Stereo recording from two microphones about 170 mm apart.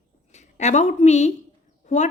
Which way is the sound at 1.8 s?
45° left (ahead or behind).